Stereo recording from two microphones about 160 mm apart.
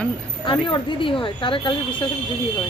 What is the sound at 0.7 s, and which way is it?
A woman's voice, 30° left (ahead or behind).